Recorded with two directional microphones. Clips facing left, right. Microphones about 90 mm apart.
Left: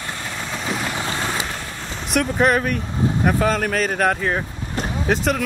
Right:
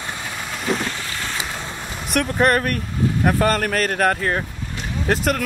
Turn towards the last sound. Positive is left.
turn(degrees=0)  # may be behind; listen again after turning